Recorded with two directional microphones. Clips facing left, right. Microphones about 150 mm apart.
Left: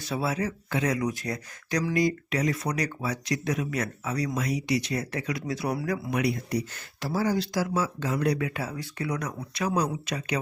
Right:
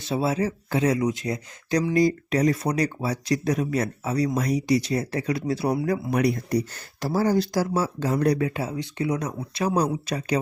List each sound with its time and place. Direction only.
0.0 s speech: 25° right (ahead or behind)
6.1 s speech: 40° right (ahead or behind)